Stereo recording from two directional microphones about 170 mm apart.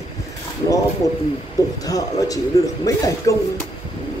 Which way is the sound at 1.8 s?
20° left (ahead or behind).